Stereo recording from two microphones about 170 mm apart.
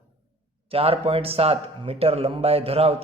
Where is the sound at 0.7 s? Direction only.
35° right (ahead or behind).